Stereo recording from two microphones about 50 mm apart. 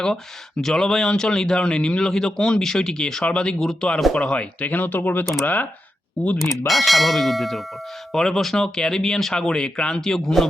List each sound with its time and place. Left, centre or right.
0.6 s a man's voice: centre
4.7 s speech: left
5.2 s speech: centre
6.7 s a man's voice: centre